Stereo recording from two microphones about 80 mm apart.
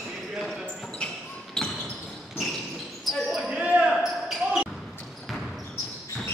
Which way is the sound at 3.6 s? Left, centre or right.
Centre.